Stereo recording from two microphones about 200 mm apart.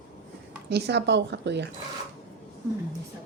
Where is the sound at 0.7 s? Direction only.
55° right (ahead or behind).